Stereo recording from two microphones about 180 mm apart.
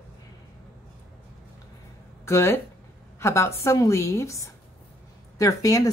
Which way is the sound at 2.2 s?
15° left (ahead or behind).